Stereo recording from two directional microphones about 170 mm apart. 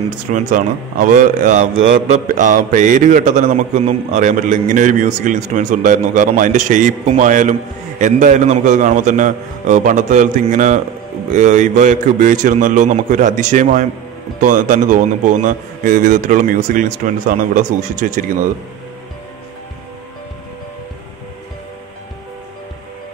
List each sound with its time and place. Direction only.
0.3 s a man's voice: 50° right (ahead or behind)